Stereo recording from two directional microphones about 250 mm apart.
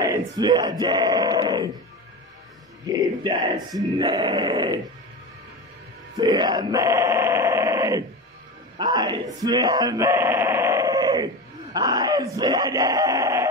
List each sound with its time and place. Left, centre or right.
0.0 s speech: centre
2.9 s speech: centre
6.1 s speech: centre
8.7 s a sound: centre
11.7 s speech: centre